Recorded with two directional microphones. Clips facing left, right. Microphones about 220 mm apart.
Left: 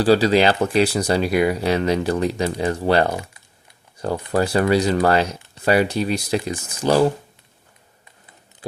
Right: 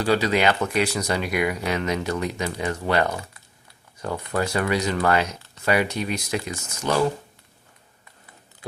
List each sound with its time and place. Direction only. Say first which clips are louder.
0.0 s speech: left 5 dB; 35° left (ahead or behind)